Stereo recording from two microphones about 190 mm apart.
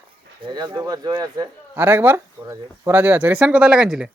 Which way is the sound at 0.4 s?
20° right (ahead or behind).